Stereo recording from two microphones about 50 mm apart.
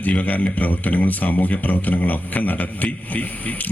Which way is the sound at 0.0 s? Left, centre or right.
Left.